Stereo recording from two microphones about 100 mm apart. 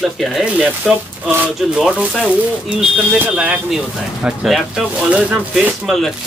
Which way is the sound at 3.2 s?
10° right (ahead or behind).